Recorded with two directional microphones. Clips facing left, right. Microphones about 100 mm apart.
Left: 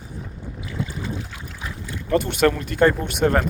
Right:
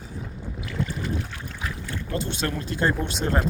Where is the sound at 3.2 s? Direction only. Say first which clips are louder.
Left 8 dB; 90° left.